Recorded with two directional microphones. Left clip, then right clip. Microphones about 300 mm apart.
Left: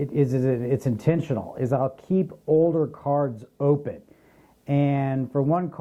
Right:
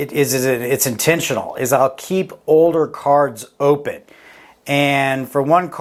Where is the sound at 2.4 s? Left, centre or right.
Right.